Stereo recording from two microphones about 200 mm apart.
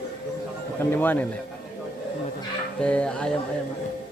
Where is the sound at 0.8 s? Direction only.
10° left (ahead or behind).